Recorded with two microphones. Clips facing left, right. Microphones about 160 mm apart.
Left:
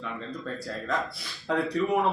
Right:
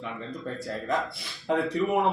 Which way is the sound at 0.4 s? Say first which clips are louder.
Right 3 dB; 20° right (ahead or behind).